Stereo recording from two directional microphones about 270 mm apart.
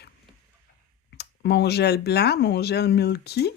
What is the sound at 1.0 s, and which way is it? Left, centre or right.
Speech, left.